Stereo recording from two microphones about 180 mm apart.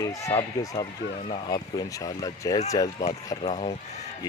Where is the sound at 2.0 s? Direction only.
20° left (ahead or behind).